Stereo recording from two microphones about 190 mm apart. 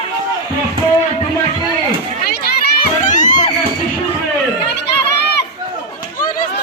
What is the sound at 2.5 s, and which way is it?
Children playing, 55° left (ahead or behind).